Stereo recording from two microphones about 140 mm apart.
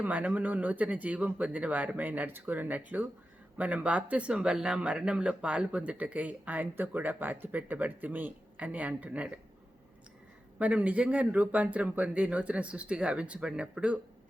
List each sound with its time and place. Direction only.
0.0 s speech: 10° right (ahead or behind)
10.6 s speech: 10° right (ahead or behind)